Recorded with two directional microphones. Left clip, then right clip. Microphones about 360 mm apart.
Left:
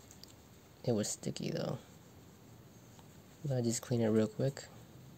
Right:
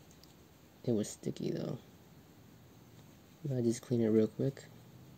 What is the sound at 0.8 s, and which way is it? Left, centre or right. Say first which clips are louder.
Speech: even; centre.